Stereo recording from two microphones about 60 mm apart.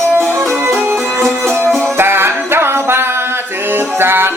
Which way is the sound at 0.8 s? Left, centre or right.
Right.